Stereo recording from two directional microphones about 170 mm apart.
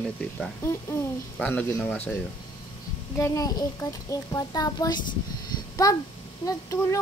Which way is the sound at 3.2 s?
20° left (ahead or behind).